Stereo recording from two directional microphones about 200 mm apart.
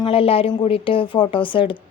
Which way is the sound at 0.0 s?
30° left (ahead or behind).